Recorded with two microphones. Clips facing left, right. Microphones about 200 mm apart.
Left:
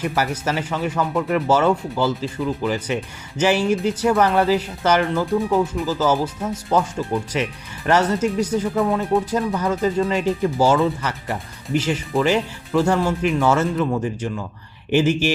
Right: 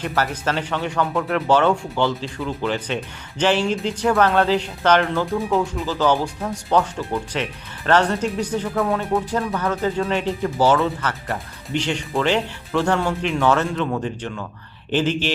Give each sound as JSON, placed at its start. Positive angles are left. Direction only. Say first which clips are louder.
{"t": 0.0, "sound": "speech", "louder": "left 1 dB", "side_deg": 10}